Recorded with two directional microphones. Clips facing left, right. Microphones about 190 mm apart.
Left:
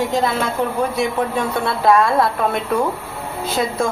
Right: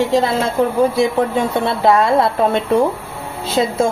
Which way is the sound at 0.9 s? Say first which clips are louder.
Right 4 dB; 25° right (ahead or behind).